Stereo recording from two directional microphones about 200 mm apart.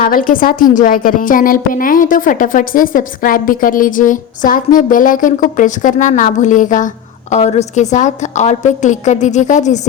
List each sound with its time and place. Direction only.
0.0 s a woman's voice: 45° left (ahead or behind)